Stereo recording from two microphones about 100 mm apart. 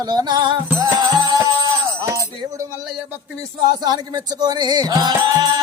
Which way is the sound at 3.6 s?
45° right (ahead or behind).